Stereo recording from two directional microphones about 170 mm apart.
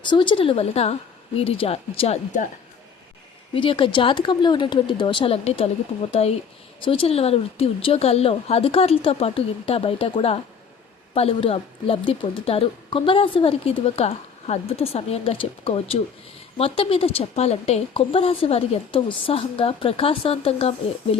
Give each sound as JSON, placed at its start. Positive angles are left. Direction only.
{"t": 0.1, "sound": "a woman's voice", "side_deg": 30}
{"t": 3.5, "sound": "a woman's voice", "side_deg": 30}